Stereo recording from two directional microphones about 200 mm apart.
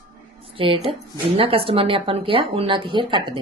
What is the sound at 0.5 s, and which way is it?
A woman's voice, 25° right (ahead or behind).